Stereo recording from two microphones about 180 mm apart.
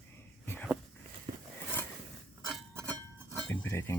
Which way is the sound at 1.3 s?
25° right (ahead or behind).